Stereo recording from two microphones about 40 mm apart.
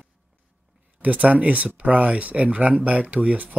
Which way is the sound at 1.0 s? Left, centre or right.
Right.